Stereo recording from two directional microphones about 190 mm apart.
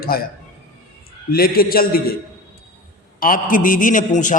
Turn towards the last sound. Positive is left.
turn(degrees=40)  # may be behind; listen again after turning